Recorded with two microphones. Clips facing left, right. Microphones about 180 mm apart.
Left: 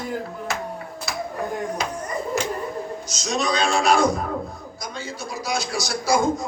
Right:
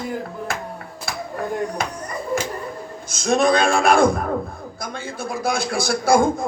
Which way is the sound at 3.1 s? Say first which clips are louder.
Right 9 dB; 55° right (ahead or behind).